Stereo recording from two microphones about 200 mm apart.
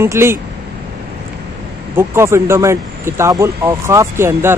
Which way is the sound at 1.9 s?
15° right (ahead or behind).